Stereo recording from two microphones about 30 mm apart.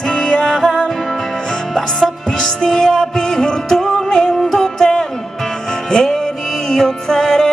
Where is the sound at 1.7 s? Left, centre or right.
Centre.